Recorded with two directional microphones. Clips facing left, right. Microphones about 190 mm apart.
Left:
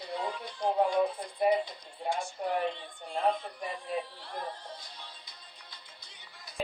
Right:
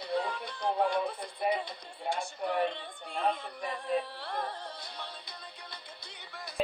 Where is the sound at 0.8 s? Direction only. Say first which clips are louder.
Left 3 dB; 65° right (ahead or behind).